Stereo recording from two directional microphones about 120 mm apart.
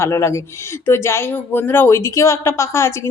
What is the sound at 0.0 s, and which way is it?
Speech, 25° left (ahead or behind).